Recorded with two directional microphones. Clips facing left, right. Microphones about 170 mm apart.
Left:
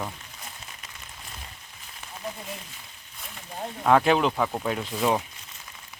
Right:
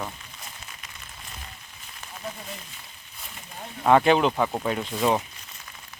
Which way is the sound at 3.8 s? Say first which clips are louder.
Right 2 dB; centre (ahead or behind).